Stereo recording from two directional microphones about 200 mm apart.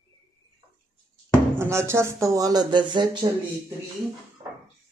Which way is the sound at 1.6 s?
15° right (ahead or behind).